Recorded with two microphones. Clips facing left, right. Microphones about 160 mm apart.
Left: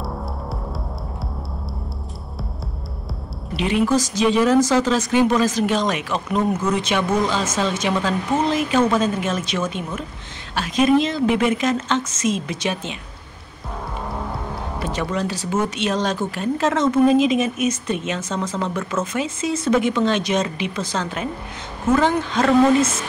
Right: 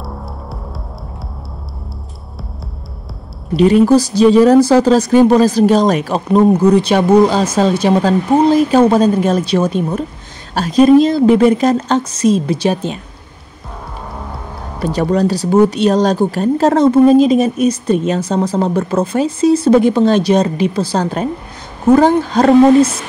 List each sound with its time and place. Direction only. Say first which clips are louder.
3.5 s speech: right 10 dB; 40° right (ahead or behind)
14.8 s speech: right 10 dB; 35° right (ahead or behind)